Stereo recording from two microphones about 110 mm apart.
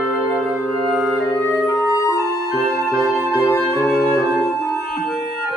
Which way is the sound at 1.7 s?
30° left (ahead or behind).